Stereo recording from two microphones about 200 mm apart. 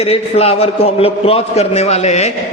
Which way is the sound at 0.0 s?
30° left (ahead or behind).